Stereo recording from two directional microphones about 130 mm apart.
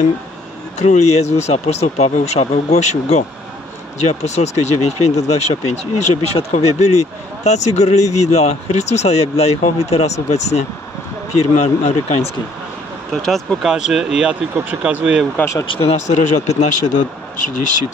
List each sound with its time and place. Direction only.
0.7 s speech: 60° left (ahead or behind)
13.1 s speech: centre (ahead or behind)
15.3 s speech: 20° left (ahead or behind)
15.6 s speech: 45° left (ahead or behind)
16.4 s speech: 60° left (ahead or behind)